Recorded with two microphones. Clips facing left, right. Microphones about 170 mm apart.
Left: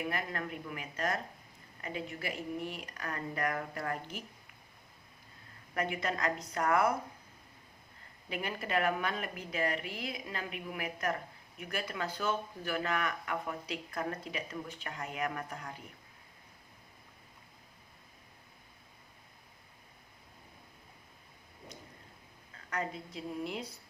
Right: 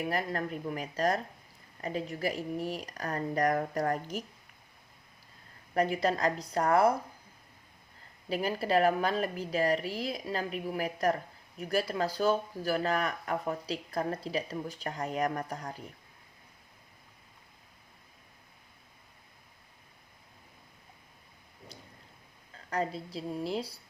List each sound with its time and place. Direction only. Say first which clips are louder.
0.0 s a woman's voice: right 5 dB; 35° right (ahead or behind)
5.7 s a woman's voice: right 7 dB; 35° right (ahead or behind)
8.3 s a woman's voice: right 7 dB; 35° right (ahead or behind)
21.7 s a sound: left 1 dB; 30° right (ahead or behind)
22.7 s a woman's voice: right 5 dB; 30° right (ahead or behind)